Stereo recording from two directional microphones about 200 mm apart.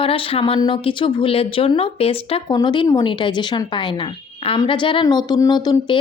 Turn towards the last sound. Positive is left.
turn(degrees=20)  # may be behind; listen again after turning